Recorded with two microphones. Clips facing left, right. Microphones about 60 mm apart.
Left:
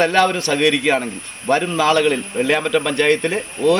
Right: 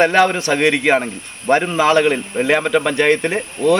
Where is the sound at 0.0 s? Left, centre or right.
Right.